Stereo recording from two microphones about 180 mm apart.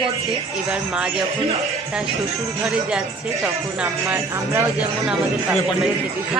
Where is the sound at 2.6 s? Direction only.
5° right (ahead or behind).